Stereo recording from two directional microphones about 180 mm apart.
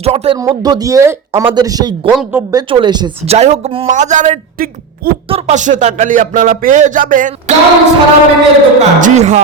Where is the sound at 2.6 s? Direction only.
30° right (ahead or behind).